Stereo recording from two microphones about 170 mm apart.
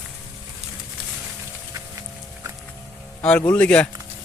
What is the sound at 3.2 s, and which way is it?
Speech, 5° left (ahead or behind).